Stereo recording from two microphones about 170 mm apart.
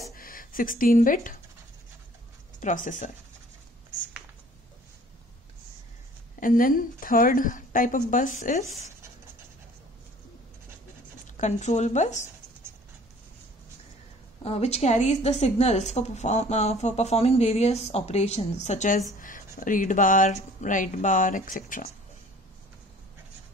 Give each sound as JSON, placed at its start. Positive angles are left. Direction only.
{"t": 0.1, "sound": "speech", "side_deg": 55}
{"t": 2.6, "sound": "speech", "side_deg": 50}
{"t": 6.4, "sound": "speech", "side_deg": 55}
{"t": 11.2, "sound": "speech", "side_deg": 45}
{"t": 14.4, "sound": "a woman's voice", "side_deg": 35}